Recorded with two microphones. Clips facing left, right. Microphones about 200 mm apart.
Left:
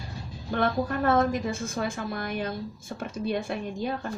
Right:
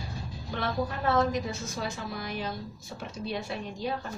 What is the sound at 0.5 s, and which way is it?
A woman's voice, 55° left (ahead or behind).